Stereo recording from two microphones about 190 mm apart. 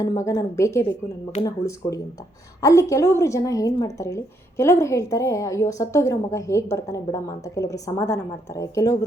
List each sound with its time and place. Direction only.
0.0 s a woman's voice: 15° left (ahead or behind)